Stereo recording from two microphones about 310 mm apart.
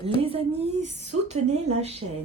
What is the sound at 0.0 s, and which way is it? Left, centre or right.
A woman's voice, centre.